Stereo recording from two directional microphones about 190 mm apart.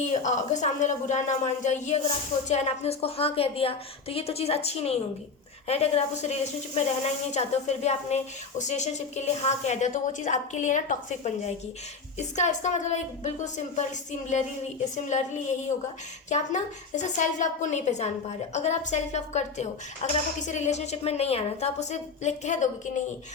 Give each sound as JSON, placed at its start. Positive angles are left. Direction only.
{"t": 0.1, "sound": "a woman's voice", "side_deg": 40}
{"t": 16.3, "sound": "a woman's voice", "side_deg": 40}